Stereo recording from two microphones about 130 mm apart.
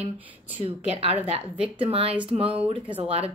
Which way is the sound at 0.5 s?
45° right (ahead or behind).